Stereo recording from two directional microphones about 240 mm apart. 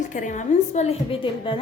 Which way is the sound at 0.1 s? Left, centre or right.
Left.